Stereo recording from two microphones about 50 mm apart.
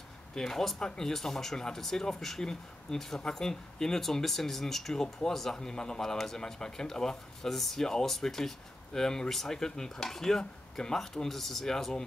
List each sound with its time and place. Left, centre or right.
0.3 s speech: centre